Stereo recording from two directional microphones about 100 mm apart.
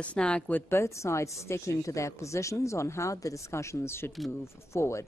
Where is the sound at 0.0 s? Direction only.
10° left (ahead or behind).